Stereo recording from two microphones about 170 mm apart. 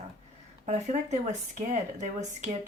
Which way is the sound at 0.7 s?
45° right (ahead or behind).